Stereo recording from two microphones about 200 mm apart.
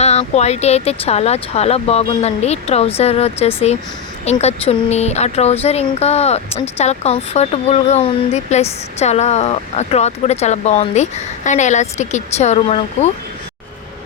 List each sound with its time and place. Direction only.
0.0 s speech: 35° left (ahead or behind)